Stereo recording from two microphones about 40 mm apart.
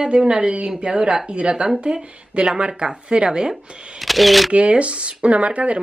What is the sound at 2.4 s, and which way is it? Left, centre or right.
Speech, centre.